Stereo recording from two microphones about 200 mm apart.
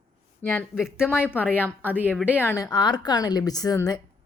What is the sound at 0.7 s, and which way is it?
Speech, 5° right (ahead or behind).